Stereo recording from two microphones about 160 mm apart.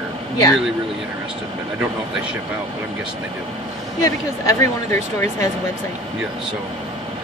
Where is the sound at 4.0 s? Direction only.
20° left (ahead or behind).